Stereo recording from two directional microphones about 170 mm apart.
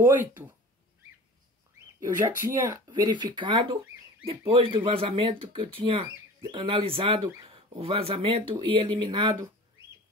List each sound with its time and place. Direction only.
0.0 s speech: 10° right (ahead or behind)
2.0 s speech: 15° right (ahead or behind)